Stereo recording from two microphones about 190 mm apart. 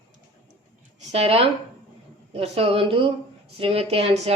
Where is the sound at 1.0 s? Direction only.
35° right (ahead or behind).